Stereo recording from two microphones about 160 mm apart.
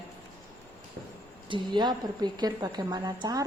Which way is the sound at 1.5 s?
30° right (ahead or behind).